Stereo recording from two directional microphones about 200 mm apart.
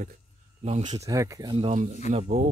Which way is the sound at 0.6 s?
35° right (ahead or behind).